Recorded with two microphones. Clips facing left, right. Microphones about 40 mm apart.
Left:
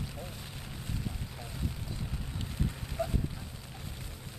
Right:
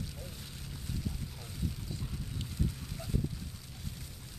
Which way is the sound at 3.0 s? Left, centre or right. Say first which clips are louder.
Left 11 dB; left.